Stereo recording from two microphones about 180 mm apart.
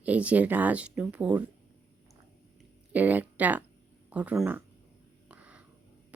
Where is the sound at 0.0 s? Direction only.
5° right (ahead or behind).